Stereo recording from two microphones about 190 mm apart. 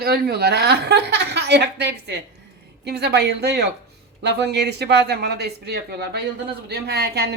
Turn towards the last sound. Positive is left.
turn(degrees=-55)  # may be behind; listen again after turning